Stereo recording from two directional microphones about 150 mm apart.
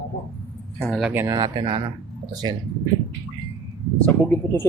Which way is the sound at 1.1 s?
25° right (ahead or behind).